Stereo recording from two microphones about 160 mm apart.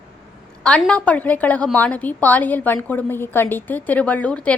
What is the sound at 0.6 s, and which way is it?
A woman's voice, 5° left (ahead or behind).